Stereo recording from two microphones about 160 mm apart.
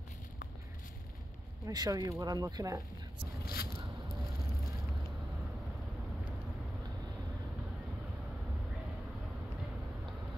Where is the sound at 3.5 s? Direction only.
70° left (ahead or behind).